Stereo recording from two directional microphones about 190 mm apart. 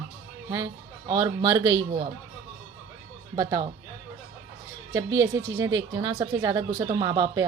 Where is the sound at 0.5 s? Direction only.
20° right (ahead or behind).